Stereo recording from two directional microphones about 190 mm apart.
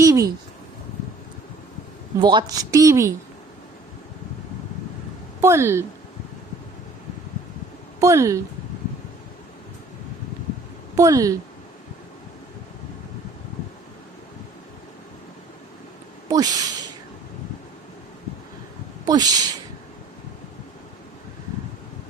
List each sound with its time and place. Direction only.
0.0 s a sound: 15° right (ahead or behind)
2.2 s a woman's voice: 20° right (ahead or behind)
5.4 s speech: 15° right (ahead or behind)
7.9 s speech: 15° right (ahead or behind)
10.9 s a woman's voice: 15° right (ahead or behind)
16.3 s speech: 20° right (ahead or behind)
19.0 s speech: 20° right (ahead or behind)